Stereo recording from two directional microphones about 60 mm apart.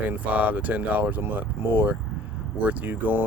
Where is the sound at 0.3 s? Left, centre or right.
Right.